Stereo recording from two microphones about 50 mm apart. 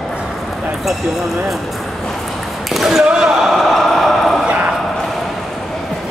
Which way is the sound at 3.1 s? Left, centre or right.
Centre.